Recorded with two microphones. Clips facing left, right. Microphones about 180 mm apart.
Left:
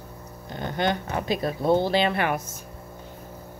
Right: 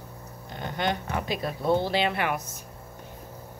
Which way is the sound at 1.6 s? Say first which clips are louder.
Left 3 dB; 25° left (ahead or behind).